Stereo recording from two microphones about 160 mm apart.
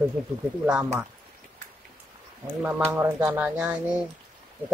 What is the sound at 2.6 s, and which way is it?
Speech, 10° right (ahead or behind).